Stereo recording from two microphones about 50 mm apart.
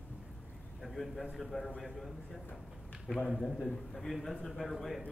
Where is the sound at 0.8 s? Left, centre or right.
Centre.